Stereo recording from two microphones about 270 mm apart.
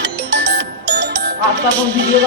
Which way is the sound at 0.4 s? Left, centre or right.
Right.